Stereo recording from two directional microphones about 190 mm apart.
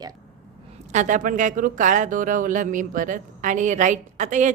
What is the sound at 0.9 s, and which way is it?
Speech, 40° right (ahead or behind).